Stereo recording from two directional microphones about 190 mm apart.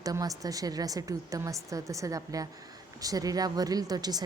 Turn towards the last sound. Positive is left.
turn(degrees=-20)  # may be behind; listen again after turning